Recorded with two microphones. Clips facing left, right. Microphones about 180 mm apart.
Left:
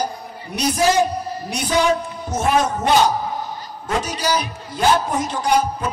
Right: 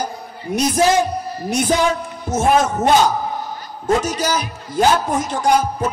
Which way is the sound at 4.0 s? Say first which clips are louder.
Right 1 dB; 45° right (ahead or behind).